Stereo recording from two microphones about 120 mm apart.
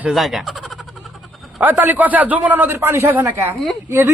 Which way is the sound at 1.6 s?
15° right (ahead or behind).